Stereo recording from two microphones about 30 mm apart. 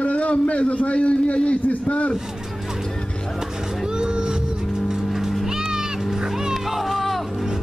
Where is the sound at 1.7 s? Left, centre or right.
Left.